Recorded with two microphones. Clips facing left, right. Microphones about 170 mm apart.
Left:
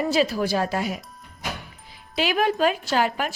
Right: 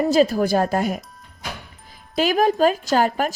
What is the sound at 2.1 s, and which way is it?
A woman's voice, 45° right (ahead or behind).